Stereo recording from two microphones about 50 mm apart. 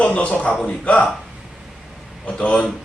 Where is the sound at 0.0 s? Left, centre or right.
Left.